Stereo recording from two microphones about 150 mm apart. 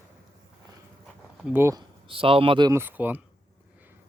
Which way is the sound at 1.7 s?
35° right (ahead or behind).